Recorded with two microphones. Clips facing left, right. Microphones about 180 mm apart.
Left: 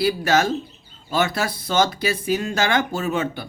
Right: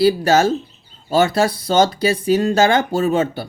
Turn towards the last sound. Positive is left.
turn(degrees=-35)  # may be behind; listen again after turning